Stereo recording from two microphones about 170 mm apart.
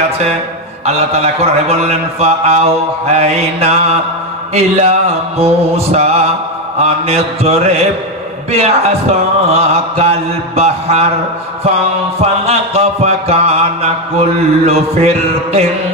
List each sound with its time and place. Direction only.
0.8 s mantra: 40° right (ahead or behind)
12.2 s mantra: 40° right (ahead or behind)